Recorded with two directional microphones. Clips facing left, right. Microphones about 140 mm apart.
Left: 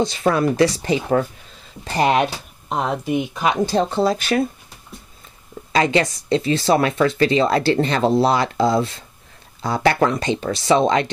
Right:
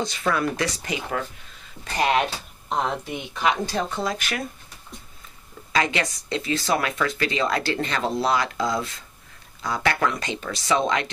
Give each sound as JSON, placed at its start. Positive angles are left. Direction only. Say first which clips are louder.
{"t": 0.0, "sound": "speech", "louder": "left 6 dB", "side_deg": 30}
{"t": 2.1, "sound": "speech", "louder": "left 4 dB", "side_deg": 10}
{"t": 3.6, "sound": "speech", "louder": "left 8 dB", "side_deg": 30}
{"t": 5.7, "sound": "speech", "louder": "left 6 dB", "side_deg": 30}